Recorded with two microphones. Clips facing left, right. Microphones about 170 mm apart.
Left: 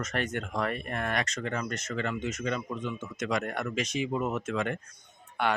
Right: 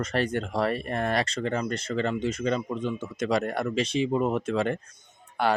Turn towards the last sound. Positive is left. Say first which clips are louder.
# right 4 dB
turn(degrees=-35)  # may be behind; listen again after turning